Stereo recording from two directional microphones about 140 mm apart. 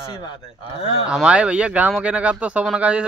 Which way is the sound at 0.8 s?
40° left (ahead or behind).